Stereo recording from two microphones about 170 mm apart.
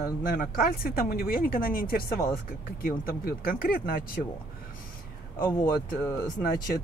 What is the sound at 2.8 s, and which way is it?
Speech, 60° left (ahead or behind).